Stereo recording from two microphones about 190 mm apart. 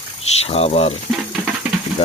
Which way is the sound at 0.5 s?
35° left (ahead or behind).